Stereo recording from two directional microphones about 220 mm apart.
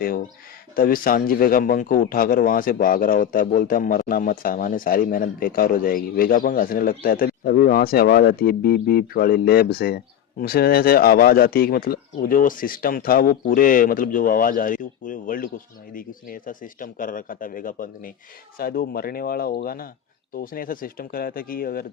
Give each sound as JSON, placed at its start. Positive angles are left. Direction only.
{"t": 0.8, "sound": "speech", "side_deg": 40}